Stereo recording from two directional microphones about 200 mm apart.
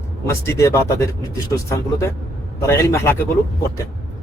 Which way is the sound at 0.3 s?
15° left (ahead or behind).